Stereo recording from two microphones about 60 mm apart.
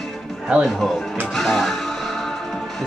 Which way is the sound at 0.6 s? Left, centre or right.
Centre.